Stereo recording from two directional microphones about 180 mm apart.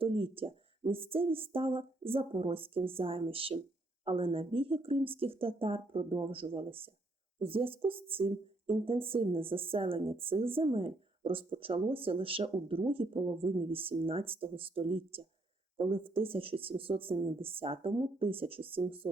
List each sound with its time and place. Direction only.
0.0 s speech: 30° right (ahead or behind)